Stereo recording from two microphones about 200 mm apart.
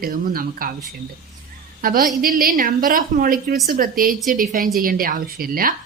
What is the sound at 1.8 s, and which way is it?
A woman's voice, 45° right (ahead or behind).